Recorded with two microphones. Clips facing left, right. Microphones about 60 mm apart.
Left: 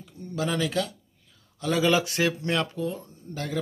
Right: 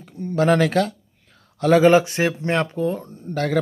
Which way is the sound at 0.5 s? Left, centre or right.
Right.